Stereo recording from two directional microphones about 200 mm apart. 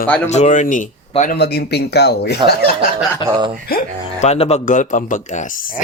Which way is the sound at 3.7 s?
40° left (ahead or behind).